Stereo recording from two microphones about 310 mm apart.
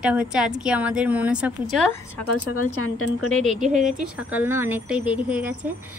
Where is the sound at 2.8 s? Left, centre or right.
Left.